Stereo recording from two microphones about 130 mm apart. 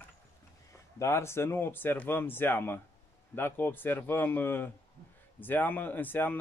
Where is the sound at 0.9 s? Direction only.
20° left (ahead or behind).